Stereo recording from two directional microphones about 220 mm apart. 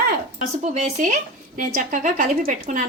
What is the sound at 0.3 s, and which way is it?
A woman's voice, 30° right (ahead or behind).